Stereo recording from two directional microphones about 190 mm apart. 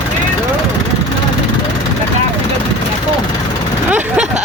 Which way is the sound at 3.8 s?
10° right (ahead or behind).